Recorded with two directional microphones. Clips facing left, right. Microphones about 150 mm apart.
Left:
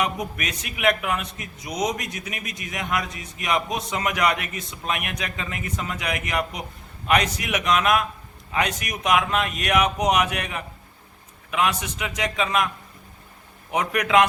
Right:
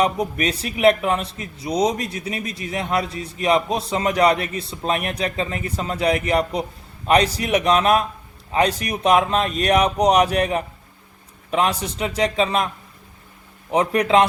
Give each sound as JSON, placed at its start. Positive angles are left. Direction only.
{"t": 0.0, "sound": "a man's voice", "side_deg": -30}